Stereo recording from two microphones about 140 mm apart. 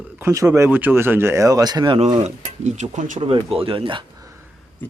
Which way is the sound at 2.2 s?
55° right (ahead or behind).